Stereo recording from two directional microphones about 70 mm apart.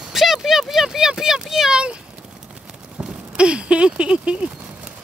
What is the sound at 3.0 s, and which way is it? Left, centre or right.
Speech, centre.